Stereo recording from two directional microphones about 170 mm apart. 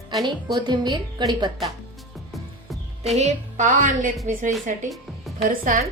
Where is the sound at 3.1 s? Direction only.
45° right (ahead or behind).